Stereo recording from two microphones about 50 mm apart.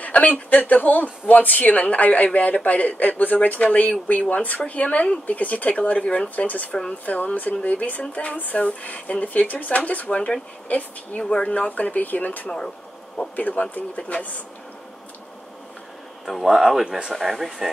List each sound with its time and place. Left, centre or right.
0.0 s speech: left
5.2 s speech: left
6.7 s speech: left
12.4 s speech: centre
13.4 s speech: left
16.3 s speech: centre